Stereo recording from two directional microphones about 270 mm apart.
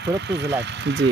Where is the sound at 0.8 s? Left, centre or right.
Right.